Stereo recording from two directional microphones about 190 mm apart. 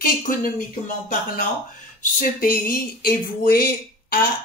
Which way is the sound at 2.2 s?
50° left (ahead or behind).